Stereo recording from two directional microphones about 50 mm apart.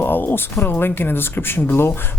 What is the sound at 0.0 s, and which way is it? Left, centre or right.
Speech, left.